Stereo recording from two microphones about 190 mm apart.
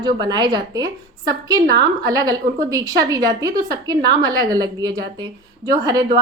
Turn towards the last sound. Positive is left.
turn(degrees=-20)  # may be behind; listen again after turning